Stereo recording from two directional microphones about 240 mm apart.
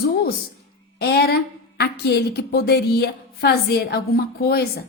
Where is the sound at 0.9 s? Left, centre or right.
Left.